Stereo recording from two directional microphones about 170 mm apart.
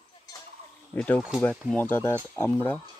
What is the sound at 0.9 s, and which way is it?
Speech, 10° left (ahead or behind).